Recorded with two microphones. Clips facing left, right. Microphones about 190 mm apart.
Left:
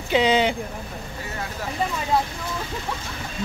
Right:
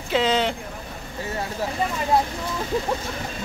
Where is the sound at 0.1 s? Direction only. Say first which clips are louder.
Left 2 dB; centre (ahead or behind).